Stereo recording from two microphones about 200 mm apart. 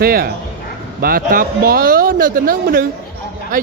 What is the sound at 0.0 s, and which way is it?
A man's voice, 50° right (ahead or behind).